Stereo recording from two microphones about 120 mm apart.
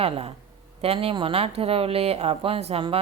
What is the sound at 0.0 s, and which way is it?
Speech, 55° right (ahead or behind).